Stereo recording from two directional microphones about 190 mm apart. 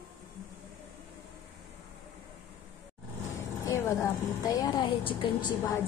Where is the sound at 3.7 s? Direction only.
15° left (ahead or behind).